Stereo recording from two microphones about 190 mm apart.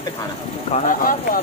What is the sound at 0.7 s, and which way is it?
Speech, 40° left (ahead or behind).